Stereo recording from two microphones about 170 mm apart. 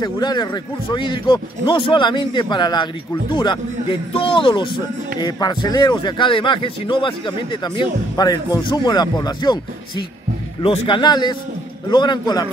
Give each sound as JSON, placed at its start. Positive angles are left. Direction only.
{"t": 0.0, "sound": "speech", "side_deg": 25}